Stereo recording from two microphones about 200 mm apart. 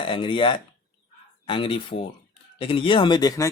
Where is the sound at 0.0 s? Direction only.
25° left (ahead or behind).